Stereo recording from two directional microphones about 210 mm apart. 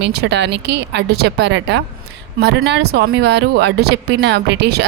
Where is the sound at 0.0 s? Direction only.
50° right (ahead or behind).